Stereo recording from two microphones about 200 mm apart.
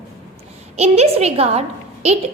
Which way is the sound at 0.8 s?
30° right (ahead or behind).